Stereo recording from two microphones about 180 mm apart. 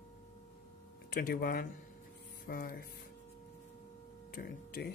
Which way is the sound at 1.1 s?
55° left (ahead or behind).